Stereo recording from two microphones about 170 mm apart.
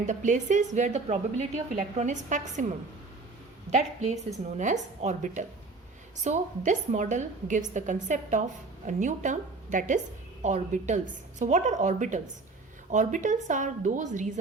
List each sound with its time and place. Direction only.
0.0 s a woman's voice: 45° right (ahead or behind)
3.7 s a woman's voice: 45° right (ahead or behind)